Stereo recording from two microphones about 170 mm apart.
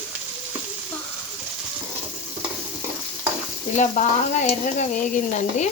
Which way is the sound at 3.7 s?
45° left (ahead or behind).